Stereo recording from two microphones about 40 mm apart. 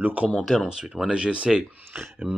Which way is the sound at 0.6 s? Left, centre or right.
Centre.